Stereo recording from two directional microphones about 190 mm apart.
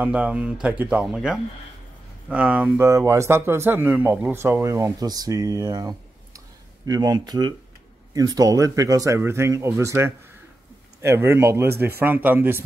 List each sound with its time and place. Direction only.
0.0 s speech: 5° right (ahead or behind)